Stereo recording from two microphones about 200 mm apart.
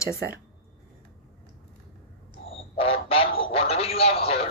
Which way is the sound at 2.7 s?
30° left (ahead or behind).